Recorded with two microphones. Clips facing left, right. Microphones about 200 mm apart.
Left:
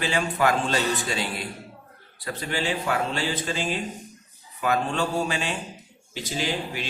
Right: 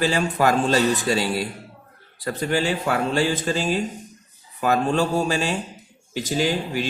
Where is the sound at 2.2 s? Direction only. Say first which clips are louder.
Right 7 dB; 45° right (ahead or behind).